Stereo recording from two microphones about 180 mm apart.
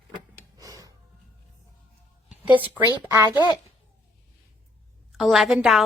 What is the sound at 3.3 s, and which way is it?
Speech, 25° left (ahead or behind).